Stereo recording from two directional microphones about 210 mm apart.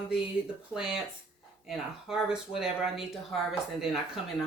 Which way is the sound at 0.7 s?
5° right (ahead or behind).